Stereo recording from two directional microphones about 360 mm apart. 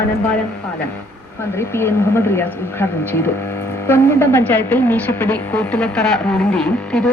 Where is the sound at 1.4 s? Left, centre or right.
Centre.